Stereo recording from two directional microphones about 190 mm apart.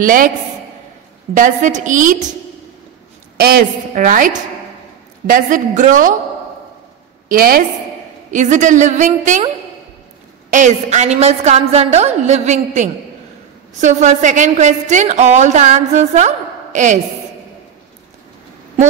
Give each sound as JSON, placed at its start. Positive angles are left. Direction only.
{"t": 0.0, "sound": "a woman's voice", "side_deg": -45}
{"t": 1.3, "sound": "a woman's voice", "side_deg": -40}
{"t": 3.3, "sound": "a woman's voice", "side_deg": -55}
{"t": 7.2, "sound": "a woman's voice", "side_deg": -50}
{"t": 10.5, "sound": "a woman's voice", "side_deg": -40}